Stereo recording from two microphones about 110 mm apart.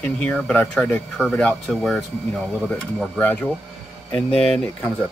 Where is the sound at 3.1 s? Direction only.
15° left (ahead or behind).